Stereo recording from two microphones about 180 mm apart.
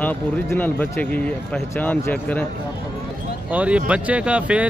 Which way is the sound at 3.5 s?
5° right (ahead or behind).